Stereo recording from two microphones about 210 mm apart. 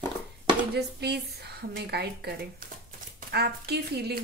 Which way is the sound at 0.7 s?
50° right (ahead or behind).